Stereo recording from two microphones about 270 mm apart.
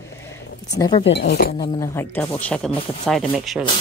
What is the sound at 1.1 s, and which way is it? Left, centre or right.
Speech, left.